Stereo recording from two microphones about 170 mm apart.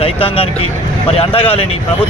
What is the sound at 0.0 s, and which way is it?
Speech, 35° left (ahead or behind).